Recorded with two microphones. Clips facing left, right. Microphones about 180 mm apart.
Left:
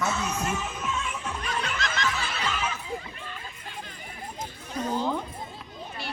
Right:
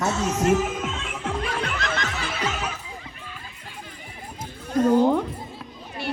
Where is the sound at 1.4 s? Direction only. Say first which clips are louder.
Right 4 dB; 55° right (ahead or behind).